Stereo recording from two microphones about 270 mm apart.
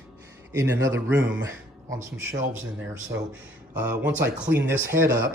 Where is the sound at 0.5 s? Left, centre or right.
Centre.